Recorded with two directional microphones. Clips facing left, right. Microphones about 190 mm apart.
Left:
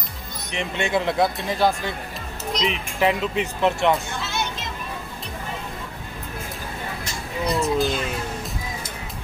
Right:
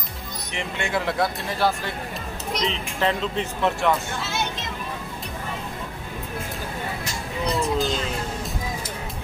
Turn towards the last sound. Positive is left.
turn(degrees=0)  # may be behind; listen again after turning